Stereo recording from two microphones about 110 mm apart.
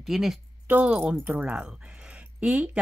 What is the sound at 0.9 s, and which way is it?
Speech, 5° right (ahead or behind).